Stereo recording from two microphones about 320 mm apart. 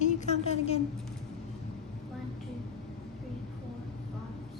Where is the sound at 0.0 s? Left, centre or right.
Left.